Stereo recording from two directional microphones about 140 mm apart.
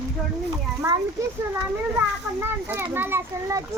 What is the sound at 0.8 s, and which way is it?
Speech, 20° right (ahead or behind).